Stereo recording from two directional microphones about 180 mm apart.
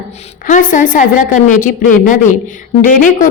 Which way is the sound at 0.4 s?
45° left (ahead or behind).